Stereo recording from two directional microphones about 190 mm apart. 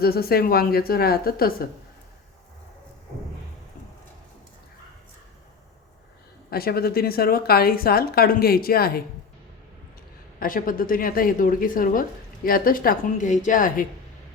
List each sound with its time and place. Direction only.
0.0 s a woman's voice: 55° left (ahead or behind)
6.5 s a woman's voice: 55° left (ahead or behind)
10.4 s a woman's voice: 45° left (ahead or behind)